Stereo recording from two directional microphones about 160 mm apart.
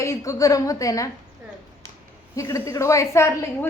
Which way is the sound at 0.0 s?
20° left (ahead or behind).